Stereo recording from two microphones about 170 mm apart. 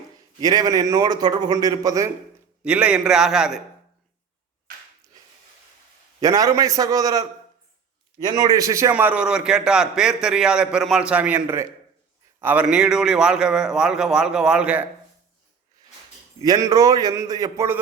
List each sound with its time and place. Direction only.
0.3 s a man's voice: 20° right (ahead or behind)
2.6 s a man's voice: 10° right (ahead or behind)
6.1 s a man's voice: 20° right (ahead or behind)
16.4 s a man's voice: 20° right (ahead or behind)